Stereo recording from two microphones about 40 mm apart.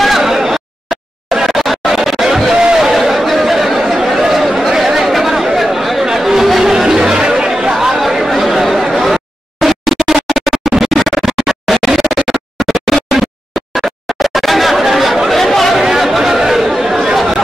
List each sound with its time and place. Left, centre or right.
0.0 s a sound: centre
1.3 s chatter: centre
2.6 s a sound: centre
6.0 s chatter: centre
7.7 s chatter: centre
8.3 s music: centre
13.7 s chatter: centre
15.7 s chatter: centre